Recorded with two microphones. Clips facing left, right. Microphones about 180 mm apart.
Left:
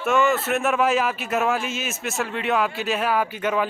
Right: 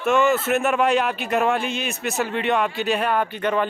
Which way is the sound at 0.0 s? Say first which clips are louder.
Right 2 dB; centre (ahead or behind).